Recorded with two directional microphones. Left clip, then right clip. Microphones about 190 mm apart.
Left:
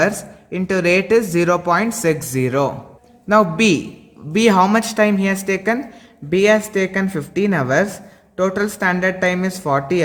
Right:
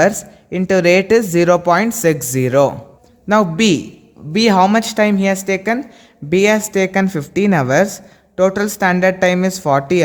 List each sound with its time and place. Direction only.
0.0 s a woman's voice: 35° right (ahead or behind)